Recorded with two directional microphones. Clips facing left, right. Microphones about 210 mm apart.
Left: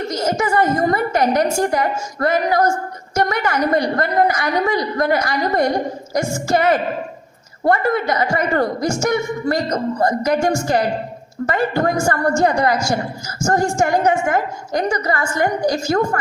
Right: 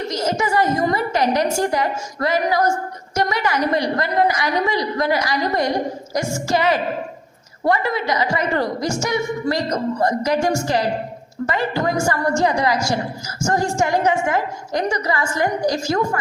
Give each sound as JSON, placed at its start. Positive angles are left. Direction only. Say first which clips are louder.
{"t": 0.1, "sound": "a woman's voice", "louder": "left 2 dB", "side_deg": 50}